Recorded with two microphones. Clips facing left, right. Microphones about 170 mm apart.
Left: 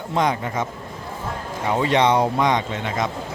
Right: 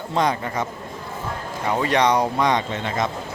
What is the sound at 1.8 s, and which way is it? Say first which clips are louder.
Speech: left 1 dB; 20° left (ahead or behind).